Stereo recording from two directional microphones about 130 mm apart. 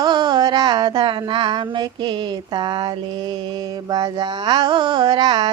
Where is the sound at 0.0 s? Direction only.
35° right (ahead or behind).